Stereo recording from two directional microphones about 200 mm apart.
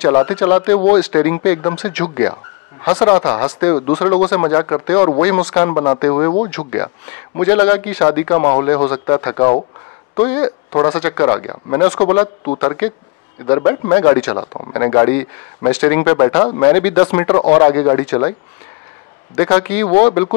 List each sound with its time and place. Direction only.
0.0 s speech: 15° left (ahead or behind)
3.1 s speech: 15° left (ahead or behind)
3.7 s a man's voice: 25° left (ahead or behind)
4.0 s a man's voice: 10° left (ahead or behind); by 6.7 s 25° left (ahead or behind)
7.3 s a man's voice: 10° left (ahead or behind)
16.7 s speech: 10° left (ahead or behind)
19.3 s speech: 10° left (ahead or behind)